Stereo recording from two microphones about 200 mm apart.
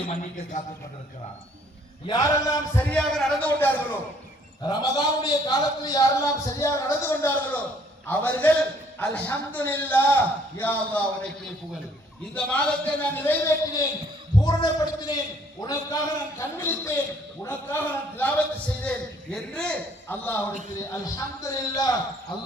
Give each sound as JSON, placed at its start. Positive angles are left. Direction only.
{"t": 2.0, "sound": "a man's voice", "side_deg": 20}
{"t": 2.9, "sound": "a man's voice", "side_deg": 0}
{"t": 4.6, "sound": "a man's voice", "side_deg": 20}
{"t": 12.3, "sound": "a man's voice", "side_deg": 5}